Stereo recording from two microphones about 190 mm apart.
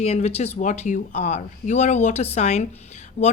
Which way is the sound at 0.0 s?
35° left (ahead or behind).